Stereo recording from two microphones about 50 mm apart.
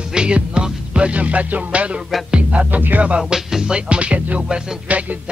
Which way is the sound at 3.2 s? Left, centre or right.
Centre.